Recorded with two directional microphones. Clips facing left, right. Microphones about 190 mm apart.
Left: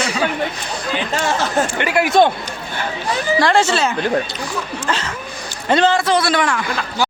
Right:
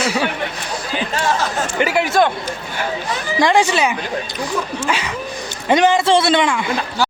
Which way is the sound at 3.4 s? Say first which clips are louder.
Right 3 dB; 15° right (ahead or behind).